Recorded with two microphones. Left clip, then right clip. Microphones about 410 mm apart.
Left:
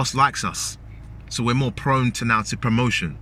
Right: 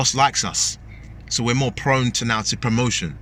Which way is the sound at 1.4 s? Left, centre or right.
Right.